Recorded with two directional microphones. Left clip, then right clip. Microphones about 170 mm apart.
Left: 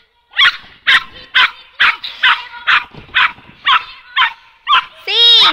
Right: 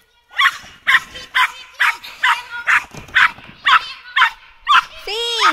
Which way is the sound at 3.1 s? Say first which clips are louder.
Even; 55° right (ahead or behind).